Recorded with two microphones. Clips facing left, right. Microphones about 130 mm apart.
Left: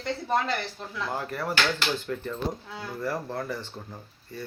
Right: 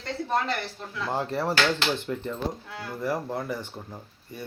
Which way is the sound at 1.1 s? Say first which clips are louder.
Right 5 dB; 25° right (ahead or behind).